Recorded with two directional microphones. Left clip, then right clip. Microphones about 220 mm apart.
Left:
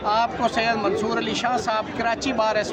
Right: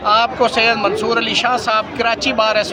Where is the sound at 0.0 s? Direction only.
5° right (ahead or behind).